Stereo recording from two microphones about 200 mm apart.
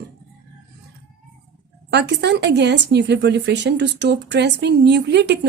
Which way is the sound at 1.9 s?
55° right (ahead or behind).